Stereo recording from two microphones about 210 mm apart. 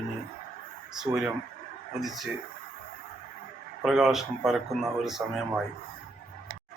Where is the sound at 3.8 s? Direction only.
Centre (ahead or behind).